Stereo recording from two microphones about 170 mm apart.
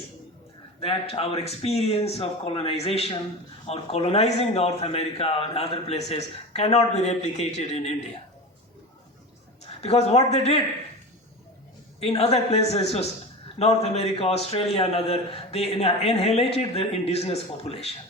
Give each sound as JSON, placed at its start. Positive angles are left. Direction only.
{"t": 0.8, "sound": "a man's voice", "side_deg": 35}
{"t": 9.8, "sound": "a man's voice", "side_deg": 40}
{"t": 11.9, "sound": "a man's voice", "side_deg": 35}